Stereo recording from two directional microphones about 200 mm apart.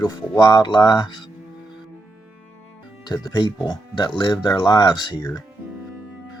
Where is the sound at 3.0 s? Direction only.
20° left (ahead or behind).